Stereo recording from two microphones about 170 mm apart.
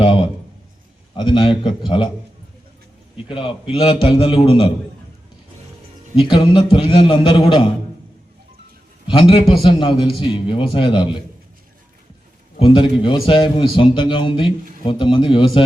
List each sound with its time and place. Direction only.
0.0 s a sound: 30° left (ahead or behind)
1.1 s a man's voice: 30° left (ahead or behind)
3.2 s a man's voice: 30° left (ahead or behind)
6.2 s a man's voice: 30° left (ahead or behind)
9.3 s a man's voice: 35° left (ahead or behind)
12.5 s a man's voice: 30° left (ahead or behind)